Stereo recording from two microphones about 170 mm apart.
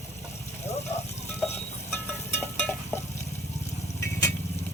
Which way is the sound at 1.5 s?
15° left (ahead or behind).